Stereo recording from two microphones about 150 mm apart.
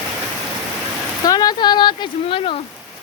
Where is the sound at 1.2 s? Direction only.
25° left (ahead or behind).